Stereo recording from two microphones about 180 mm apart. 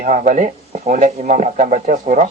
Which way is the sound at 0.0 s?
50° right (ahead or behind).